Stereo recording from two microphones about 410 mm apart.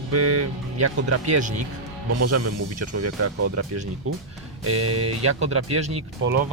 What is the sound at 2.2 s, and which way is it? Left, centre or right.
Speech, right.